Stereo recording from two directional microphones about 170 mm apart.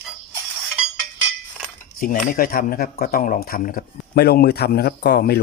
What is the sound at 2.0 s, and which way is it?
Speech, 55° left (ahead or behind).